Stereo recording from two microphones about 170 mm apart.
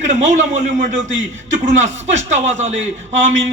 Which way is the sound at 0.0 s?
45° right (ahead or behind).